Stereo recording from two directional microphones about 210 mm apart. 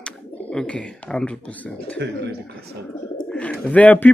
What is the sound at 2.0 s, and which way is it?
Speech, 55° right (ahead or behind).